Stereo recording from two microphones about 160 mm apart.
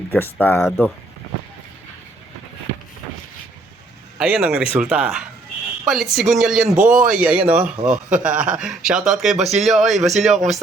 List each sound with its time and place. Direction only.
0.1 s speech: 10° left (ahead or behind)
4.2 s speech: 5° right (ahead or behind)
6.7 s speech: 55° right (ahead or behind)
7.2 s a man's voice: 5° right (ahead or behind)